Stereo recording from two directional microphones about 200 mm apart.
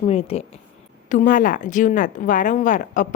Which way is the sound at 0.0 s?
30° left (ahead or behind).